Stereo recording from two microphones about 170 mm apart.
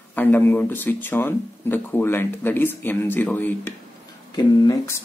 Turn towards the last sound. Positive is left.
turn(degrees=20)  # may be behind; listen again after turning